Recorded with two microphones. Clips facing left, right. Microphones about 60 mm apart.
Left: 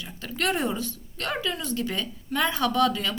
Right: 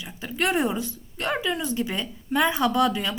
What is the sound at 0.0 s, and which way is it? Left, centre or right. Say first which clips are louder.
Speech: right 2 dB; centre.